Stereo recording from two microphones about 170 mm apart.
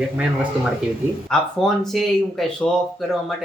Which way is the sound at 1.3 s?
5° left (ahead or behind).